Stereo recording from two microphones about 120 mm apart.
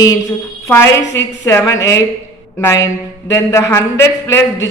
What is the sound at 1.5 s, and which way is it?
Speech, 25° left (ahead or behind).